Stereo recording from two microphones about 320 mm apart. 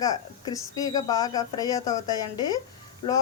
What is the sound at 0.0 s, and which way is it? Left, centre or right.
A woman's voice, centre.